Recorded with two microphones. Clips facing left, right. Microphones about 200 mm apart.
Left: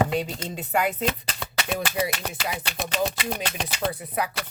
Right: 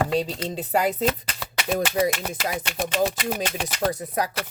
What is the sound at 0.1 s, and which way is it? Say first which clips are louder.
Speech: right 3 dB; 35° right (ahead or behind).